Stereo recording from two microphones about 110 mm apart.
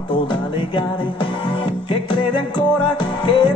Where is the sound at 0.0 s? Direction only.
45° left (ahead or behind).